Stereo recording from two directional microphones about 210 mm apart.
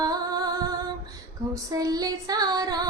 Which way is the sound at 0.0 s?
15° right (ahead or behind).